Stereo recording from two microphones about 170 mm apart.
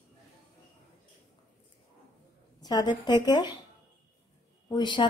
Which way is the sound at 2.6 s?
25° left (ahead or behind).